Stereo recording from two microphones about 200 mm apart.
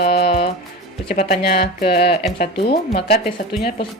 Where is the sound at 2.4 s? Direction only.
55° left (ahead or behind).